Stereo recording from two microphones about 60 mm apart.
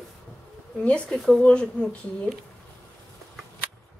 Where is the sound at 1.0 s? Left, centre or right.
Centre.